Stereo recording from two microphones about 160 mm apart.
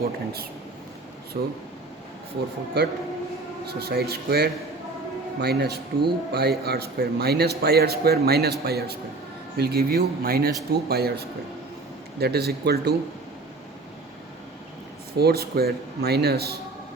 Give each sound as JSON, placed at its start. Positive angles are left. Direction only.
{"t": 1.4, "sound": "speech", "side_deg": -65}
{"t": 2.8, "sound": "speech", "side_deg": -90}
{"t": 15.1, "sound": "speech", "side_deg": -75}